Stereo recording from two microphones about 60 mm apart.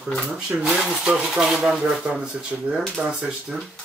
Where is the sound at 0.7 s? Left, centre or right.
Centre.